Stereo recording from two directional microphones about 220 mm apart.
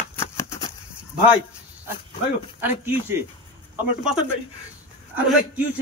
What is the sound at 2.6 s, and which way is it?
Speech, 10° right (ahead or behind).